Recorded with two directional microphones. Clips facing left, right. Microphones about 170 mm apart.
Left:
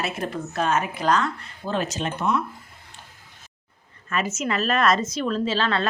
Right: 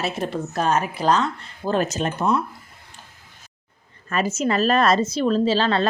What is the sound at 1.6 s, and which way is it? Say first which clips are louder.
Speech: right 4 dB; 45° right (ahead or behind).